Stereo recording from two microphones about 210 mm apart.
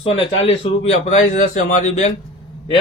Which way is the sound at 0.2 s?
30° left (ahead or behind).